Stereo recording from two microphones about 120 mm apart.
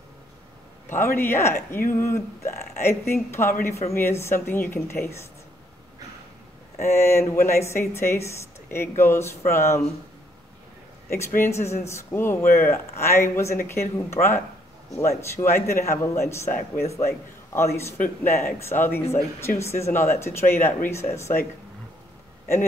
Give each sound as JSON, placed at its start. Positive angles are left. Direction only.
{"t": 0.8, "sound": "speech", "side_deg": 20}
{"t": 6.8, "sound": "speech", "side_deg": 20}
{"t": 11.1, "sound": "speech", "side_deg": 25}
{"t": 15.3, "sound": "speech", "side_deg": 25}